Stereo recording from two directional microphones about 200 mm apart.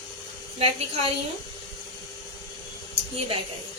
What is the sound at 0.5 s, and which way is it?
Speech, 30° right (ahead or behind).